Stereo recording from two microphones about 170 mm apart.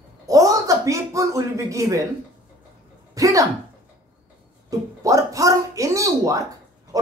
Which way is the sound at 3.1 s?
20° right (ahead or behind).